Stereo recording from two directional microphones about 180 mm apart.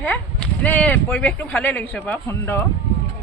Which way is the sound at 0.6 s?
10° left (ahead or behind).